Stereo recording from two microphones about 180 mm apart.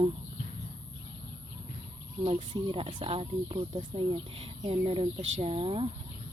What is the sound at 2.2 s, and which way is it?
Speech, 30° right (ahead or behind).